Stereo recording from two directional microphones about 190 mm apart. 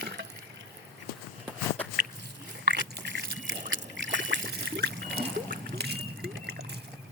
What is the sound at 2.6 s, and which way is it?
Trickle, 60° right (ahead or behind).